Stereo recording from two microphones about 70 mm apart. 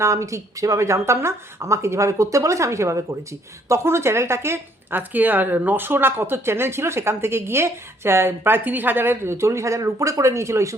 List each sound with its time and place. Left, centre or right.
0.0 s a woman's voice: right